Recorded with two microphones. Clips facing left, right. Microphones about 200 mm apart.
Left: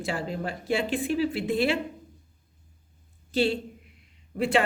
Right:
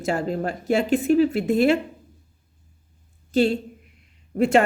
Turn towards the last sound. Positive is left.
turn(degrees=-45)  # may be behind; listen again after turning